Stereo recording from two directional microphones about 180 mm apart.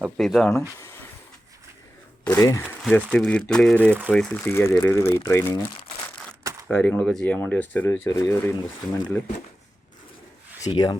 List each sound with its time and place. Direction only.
0.0 s speech: centre (ahead or behind)
0.8 s a sound: 15° left (ahead or behind)
2.2 s speech: 15° left (ahead or behind)
6.7 s speech: 10° left (ahead or behind)
10.7 s speech: 20° left (ahead or behind)